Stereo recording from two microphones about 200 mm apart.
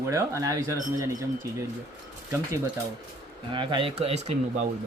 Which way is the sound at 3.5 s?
25° right (ahead or behind).